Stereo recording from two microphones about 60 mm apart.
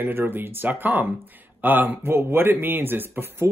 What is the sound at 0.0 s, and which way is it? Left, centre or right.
Speech, right.